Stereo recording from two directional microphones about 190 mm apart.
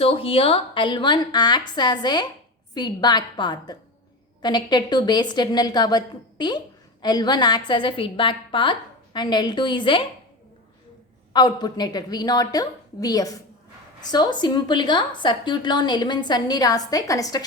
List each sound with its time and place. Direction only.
0.0 s a woman's voice: 30° left (ahead or behind)
11.3 s a woman's voice: 20° left (ahead or behind)